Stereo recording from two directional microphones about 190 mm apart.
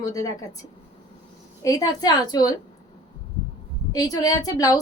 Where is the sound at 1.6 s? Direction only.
20° left (ahead or behind).